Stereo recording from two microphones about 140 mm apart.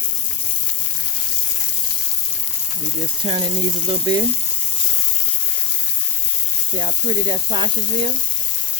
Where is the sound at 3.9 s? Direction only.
30° right (ahead or behind).